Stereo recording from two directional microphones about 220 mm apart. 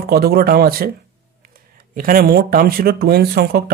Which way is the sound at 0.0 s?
45° right (ahead or behind).